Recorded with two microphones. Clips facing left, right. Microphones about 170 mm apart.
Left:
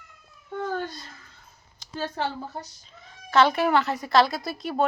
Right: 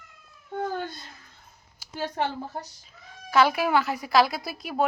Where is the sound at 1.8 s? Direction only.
15° right (ahead or behind).